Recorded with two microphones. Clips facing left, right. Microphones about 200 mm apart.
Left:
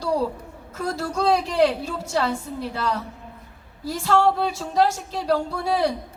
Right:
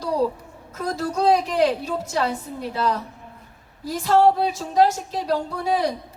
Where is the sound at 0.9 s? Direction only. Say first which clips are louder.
Right 2 dB; 35° right (ahead or behind).